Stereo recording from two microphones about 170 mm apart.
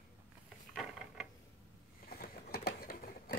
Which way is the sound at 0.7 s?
Centre (ahead or behind).